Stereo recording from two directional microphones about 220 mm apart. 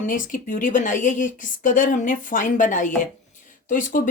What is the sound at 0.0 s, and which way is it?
A woman's voice, 40° left (ahead or behind).